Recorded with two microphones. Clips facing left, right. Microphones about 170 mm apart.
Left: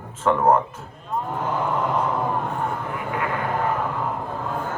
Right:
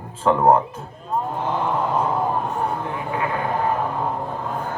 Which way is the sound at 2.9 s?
25° right (ahead or behind).